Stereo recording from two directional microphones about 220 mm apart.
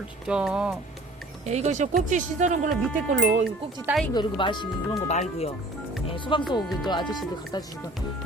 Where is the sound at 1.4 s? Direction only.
30° right (ahead or behind).